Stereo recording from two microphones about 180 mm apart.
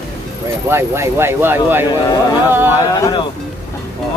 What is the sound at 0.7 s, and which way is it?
Speech, 15° right (ahead or behind).